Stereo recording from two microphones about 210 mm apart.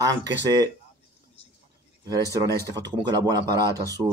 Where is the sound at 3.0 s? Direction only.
20° right (ahead or behind).